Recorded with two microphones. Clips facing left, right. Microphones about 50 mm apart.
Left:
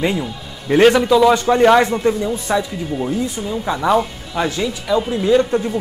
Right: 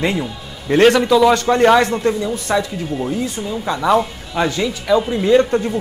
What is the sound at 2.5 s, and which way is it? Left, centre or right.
Speech, centre.